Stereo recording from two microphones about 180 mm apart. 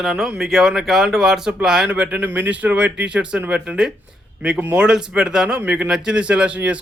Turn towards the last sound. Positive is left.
turn(degrees=-10)  # may be behind; listen again after turning